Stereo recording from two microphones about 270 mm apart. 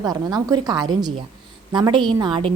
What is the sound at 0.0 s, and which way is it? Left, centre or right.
A woman's voice, centre.